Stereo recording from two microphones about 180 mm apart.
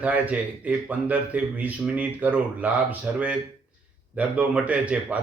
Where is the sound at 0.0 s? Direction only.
10° right (ahead or behind).